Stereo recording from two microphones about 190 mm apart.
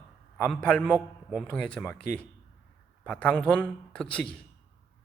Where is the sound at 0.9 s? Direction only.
10° right (ahead or behind).